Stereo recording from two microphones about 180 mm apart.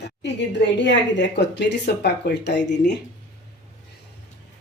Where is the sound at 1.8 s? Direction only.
60° left (ahead or behind).